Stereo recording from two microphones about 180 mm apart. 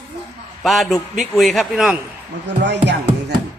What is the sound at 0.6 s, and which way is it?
A man's voice, centre (ahead or behind).